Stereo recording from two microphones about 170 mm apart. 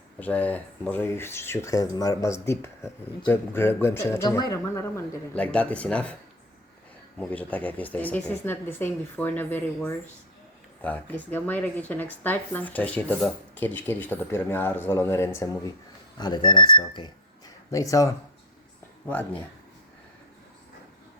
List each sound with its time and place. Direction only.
0.2 s speech: 10° left (ahead or behind)
7.2 s speech: 10° left (ahead or behind)
19.0 s speech: 10° left (ahead or behind)